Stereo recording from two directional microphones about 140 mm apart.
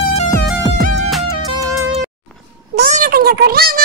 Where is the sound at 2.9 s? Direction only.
80° right.